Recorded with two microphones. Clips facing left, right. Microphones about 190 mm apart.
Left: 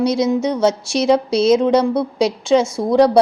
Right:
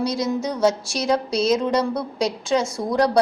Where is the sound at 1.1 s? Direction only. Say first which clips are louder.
Left 5 dB; centre (ahead or behind).